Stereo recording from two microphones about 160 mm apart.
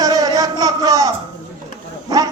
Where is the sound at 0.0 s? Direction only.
25° right (ahead or behind).